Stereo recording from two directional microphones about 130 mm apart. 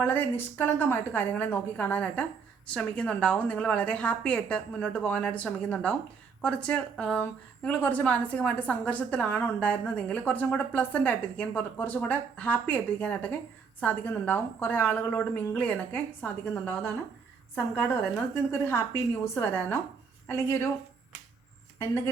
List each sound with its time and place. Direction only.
0.0 s a woman's voice: 15° left (ahead or behind)
18.5 s a woman's voice: 20° left (ahead or behind)
21.8 s speech: 20° left (ahead or behind)